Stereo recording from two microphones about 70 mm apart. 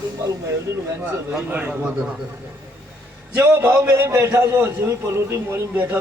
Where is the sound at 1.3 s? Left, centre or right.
Right.